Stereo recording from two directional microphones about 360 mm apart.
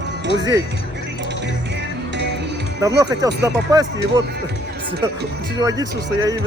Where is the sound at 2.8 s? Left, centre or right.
Centre.